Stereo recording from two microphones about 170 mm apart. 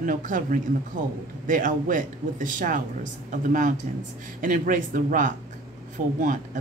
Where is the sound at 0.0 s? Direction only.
55° right (ahead or behind).